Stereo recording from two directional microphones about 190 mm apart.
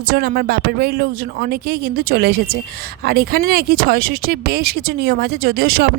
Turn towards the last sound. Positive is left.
turn(degrees=-50)  # may be behind; listen again after turning